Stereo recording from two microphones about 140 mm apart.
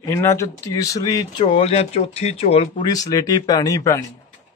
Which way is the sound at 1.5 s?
45° left (ahead or behind).